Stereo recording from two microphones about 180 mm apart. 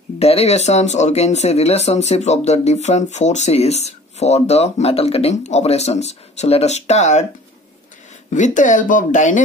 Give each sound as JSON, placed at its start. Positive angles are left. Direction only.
{"t": 0.2, "sound": "speech", "side_deg": 35}
{"t": 8.3, "sound": "speech", "side_deg": 45}